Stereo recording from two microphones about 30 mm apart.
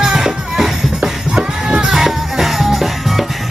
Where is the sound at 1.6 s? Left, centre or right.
Right.